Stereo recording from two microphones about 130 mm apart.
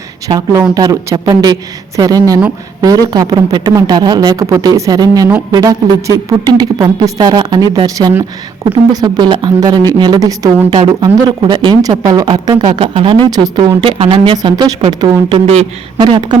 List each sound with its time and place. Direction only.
0.3 s speech: 30° right (ahead or behind)
12.9 s speech: 45° right (ahead or behind)
13.3 s speech: 30° right (ahead or behind)
13.8 s speech: 45° right (ahead or behind)
14.3 s speech: 30° right (ahead or behind)
14.8 s speech: 50° right (ahead or behind)
16.0 s speech: 40° right (ahead or behind)